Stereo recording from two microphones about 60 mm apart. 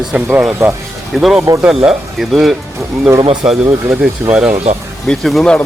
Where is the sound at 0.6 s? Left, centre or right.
Right.